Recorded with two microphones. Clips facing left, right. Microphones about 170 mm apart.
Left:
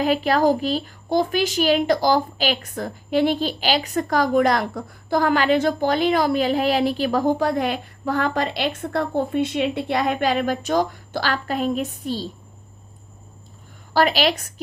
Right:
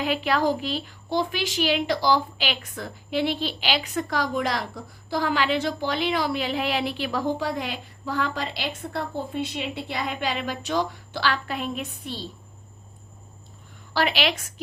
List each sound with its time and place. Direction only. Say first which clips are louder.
0.0 s a woman's voice: left 5 dB; 40° left (ahead or behind)
13.9 s a woman's voice: left 5 dB; 40° left (ahead or behind)